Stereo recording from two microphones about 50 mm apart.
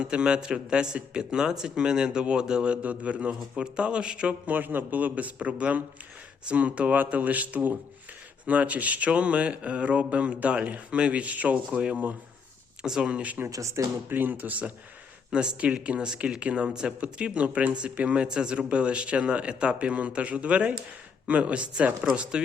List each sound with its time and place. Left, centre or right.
0.0 s speech: centre
4.5 s a man's voice: right
13.8 s speech: right
14.1 s a man's voice: right
15.3 s speech: centre